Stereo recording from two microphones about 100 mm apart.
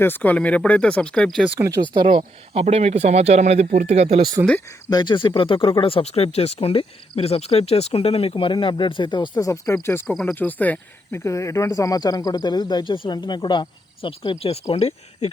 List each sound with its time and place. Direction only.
0.0 s speech: 20° left (ahead or behind)
1.9 s speech: 55° right (ahead or behind); by 4.2 s 90° right
4.4 s speech: 25° right (ahead or behind)
4.9 s speech: 45° left (ahead or behind)
5.8 s speech: 75° left (ahead or behind)
7.2 s speech: 90° left; by 8.5 s 70° left (ahead or behind)
8.5 s speech: 55° left (ahead or behind)
9.4 s speech: 35° left (ahead or behind); by 11.2 s 15° left (ahead or behind)
11.2 s speech: 30° left (ahead or behind); by 14.1 s 55° left (ahead or behind)
14.3 s speech: 90° left